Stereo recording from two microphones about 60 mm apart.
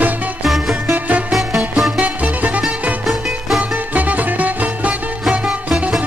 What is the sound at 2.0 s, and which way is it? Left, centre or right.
Music, right.